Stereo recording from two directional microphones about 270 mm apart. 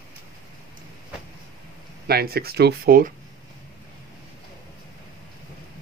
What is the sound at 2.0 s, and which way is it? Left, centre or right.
Speech, right.